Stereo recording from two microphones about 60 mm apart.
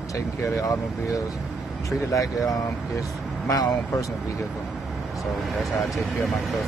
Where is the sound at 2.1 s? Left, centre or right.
Left.